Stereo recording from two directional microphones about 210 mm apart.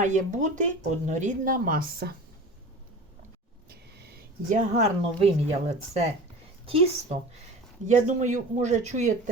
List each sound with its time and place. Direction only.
0.0 s speech: 35° right (ahead or behind)
3.7 s a woman's voice: 50° right (ahead or behind)